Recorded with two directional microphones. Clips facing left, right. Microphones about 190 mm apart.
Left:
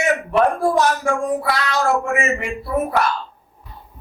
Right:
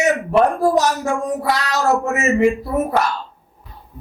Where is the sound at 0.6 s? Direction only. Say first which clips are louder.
Right 1 dB; 40° right (ahead or behind).